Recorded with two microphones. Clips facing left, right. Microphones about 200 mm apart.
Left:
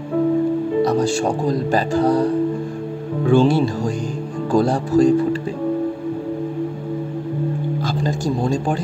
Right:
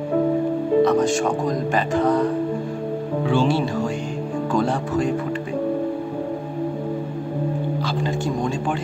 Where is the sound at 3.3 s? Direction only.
45° left (ahead or behind).